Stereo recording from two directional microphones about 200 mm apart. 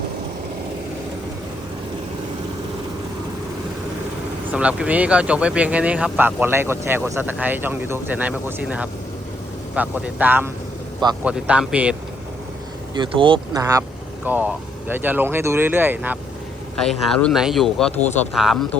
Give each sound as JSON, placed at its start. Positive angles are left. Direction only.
{"t": 4.5, "sound": "speech", "side_deg": -5}
{"t": 12.9, "sound": "speech", "side_deg": -25}
{"t": 16.7, "sound": "speech", "side_deg": 5}